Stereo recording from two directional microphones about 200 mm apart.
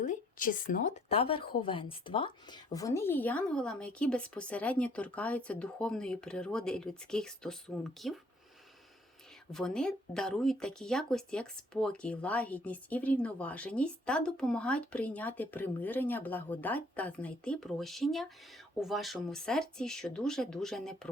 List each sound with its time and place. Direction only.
0.0 s a sound: 40° left (ahead or behind)
1.1 s speech: 25° left (ahead or behind); by 8.2 s centre (ahead or behind)
9.5 s speech: 5° left (ahead or behind)